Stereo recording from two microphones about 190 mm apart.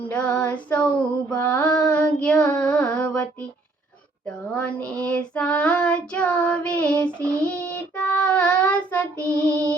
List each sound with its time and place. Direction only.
0.1 s female singing: 10° left (ahead or behind)
4.5 s child singing: 10° left (ahead or behind)
9.1 s child singing: 15° right (ahead or behind)